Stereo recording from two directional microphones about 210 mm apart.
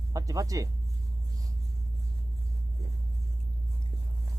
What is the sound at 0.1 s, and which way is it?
Speech, 15° right (ahead or behind).